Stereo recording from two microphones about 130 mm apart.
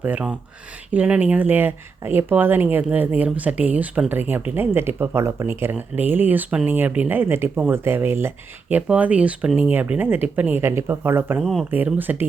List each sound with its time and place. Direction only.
0.0 s speech: 10° right (ahead or behind)